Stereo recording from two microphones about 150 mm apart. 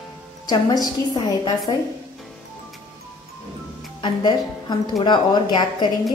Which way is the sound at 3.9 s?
30° left (ahead or behind).